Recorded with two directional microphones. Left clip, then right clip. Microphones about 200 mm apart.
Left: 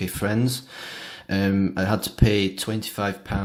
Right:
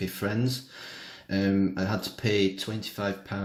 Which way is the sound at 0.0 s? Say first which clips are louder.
Left 5 dB; 30° left (ahead or behind).